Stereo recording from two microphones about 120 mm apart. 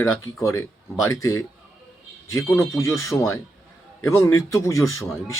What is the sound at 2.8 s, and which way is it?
Speech, 25° left (ahead or behind).